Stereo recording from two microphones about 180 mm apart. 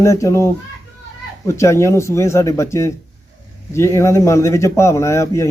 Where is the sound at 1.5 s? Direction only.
15° left (ahead or behind).